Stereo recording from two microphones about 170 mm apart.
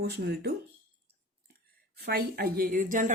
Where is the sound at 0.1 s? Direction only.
75° right (ahead or behind).